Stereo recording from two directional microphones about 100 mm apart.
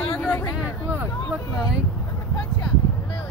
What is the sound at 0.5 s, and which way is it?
Speech, 20° right (ahead or behind).